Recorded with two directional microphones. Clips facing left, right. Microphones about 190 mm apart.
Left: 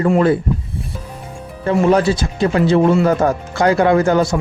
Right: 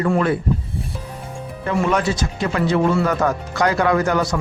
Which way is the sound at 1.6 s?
30° left (ahead or behind).